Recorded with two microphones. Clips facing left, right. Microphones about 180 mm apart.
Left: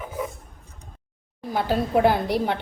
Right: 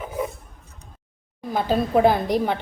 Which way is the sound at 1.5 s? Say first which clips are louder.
Right 2 dB; 15° right (ahead or behind).